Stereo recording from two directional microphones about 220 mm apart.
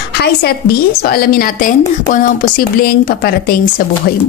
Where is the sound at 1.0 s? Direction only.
45° left (ahead or behind).